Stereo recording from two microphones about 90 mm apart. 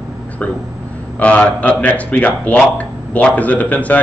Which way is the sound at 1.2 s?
15° left (ahead or behind).